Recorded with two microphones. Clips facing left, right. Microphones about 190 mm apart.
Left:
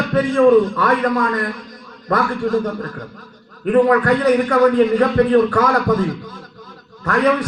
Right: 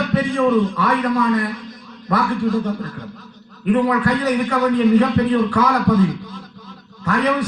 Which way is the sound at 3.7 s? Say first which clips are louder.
Left 3 dB; 45° left (ahead or behind).